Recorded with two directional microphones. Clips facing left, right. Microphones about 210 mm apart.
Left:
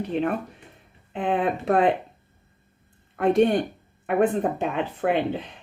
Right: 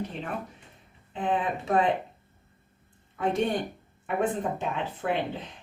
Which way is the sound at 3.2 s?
60° left (ahead or behind).